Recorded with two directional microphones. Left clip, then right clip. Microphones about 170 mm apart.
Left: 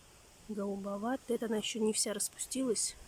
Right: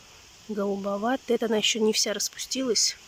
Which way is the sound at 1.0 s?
Centre (ahead or behind).